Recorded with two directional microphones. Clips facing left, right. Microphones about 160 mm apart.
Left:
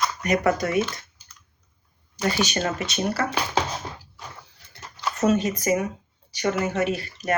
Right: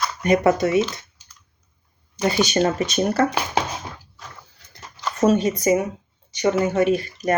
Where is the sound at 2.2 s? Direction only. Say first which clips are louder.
Right 5 dB; 30° right (ahead or behind).